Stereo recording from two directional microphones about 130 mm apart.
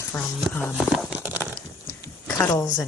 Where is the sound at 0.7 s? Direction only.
Centre (ahead or behind).